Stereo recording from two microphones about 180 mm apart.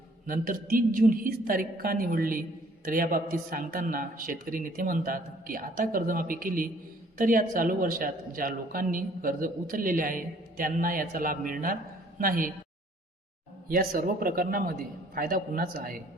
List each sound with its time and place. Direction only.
0.3 s a man's voice: 50° right (ahead or behind)
13.7 s a man's voice: 55° right (ahead or behind)